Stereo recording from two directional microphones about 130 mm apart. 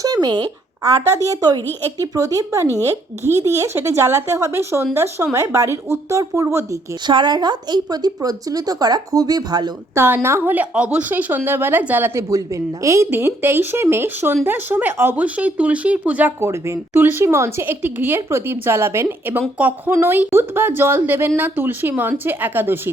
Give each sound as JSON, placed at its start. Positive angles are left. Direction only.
{"t": 0.0, "sound": "speech", "side_deg": -30}
{"t": 7.1, "sound": "a woman's voice", "side_deg": -35}
{"t": 9.9, "sound": "speech", "side_deg": -20}